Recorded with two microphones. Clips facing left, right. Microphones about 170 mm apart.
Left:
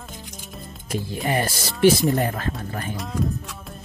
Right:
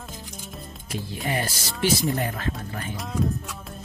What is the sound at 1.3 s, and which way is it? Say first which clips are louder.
Speech: left 4 dB; 50° left (ahead or behind).